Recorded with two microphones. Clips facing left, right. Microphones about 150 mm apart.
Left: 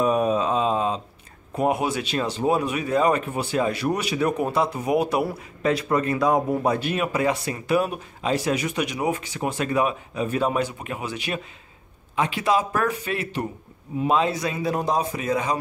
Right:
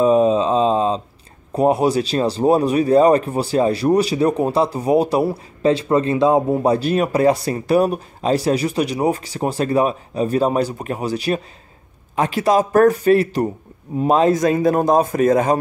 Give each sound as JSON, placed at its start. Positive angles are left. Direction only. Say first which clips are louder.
{"t": 0.0, "sound": "mantra", "louder": "right 7 dB", "side_deg": -25}
{"t": 1.5, "sound": "a man's voice", "louder": "right 7 dB", "side_deg": -35}